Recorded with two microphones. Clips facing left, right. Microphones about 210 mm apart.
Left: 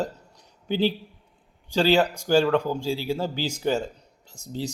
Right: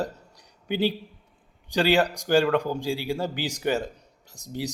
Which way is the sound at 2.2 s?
55° right (ahead or behind).